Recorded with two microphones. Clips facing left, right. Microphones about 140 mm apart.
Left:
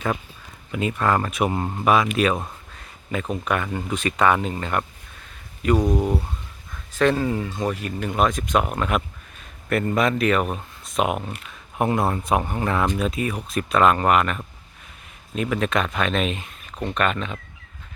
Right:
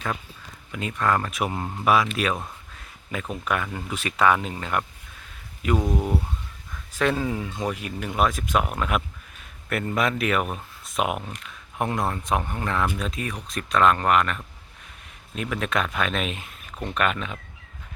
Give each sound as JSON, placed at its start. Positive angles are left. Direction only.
{"t": 0.7, "sound": "speech", "side_deg": 5}
{"t": 5.7, "sound": "speech", "side_deg": 15}
{"t": 6.9, "sound": "speech", "side_deg": -10}